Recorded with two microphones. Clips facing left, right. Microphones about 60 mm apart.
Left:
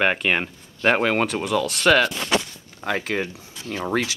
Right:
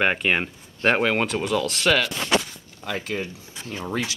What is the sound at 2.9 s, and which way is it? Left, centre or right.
Speech, left.